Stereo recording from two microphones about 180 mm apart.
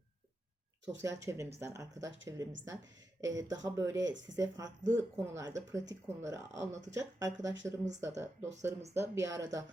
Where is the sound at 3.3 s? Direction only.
20° right (ahead or behind).